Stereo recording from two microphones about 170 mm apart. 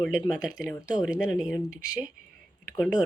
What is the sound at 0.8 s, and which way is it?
Speech, 20° left (ahead or behind).